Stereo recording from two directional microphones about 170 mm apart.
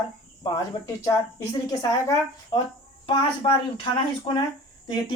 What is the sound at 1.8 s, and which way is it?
Speech, 20° left (ahead or behind).